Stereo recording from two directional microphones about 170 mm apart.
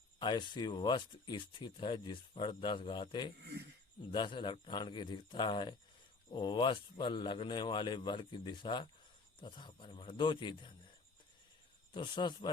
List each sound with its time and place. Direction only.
0.2 s speech: 25° left (ahead or behind)
11.9 s speech: 30° left (ahead or behind)